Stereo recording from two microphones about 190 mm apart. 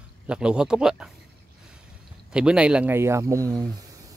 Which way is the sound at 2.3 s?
5° right (ahead or behind).